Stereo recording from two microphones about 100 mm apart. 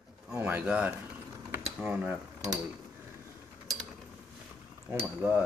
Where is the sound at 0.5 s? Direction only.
15° right (ahead or behind).